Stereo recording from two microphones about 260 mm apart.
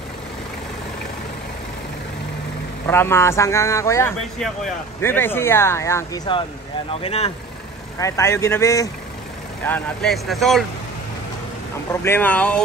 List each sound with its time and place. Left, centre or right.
2.9 s speech: centre
8.0 s speech: centre
11.9 s speech: centre